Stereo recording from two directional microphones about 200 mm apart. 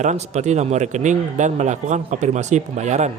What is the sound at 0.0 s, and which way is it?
Speech, 35° right (ahead or behind).